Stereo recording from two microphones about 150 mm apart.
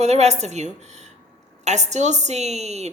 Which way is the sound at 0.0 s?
45° right (ahead or behind).